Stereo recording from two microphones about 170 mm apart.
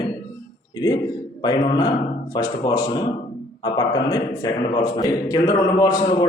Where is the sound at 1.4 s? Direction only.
25° left (ahead or behind).